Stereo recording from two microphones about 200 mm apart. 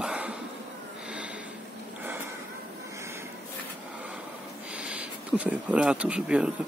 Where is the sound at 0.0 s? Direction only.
5° right (ahead or behind).